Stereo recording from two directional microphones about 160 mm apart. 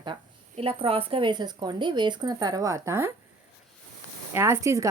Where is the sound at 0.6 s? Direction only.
35° right (ahead or behind); by 3.1 s 15° right (ahead or behind).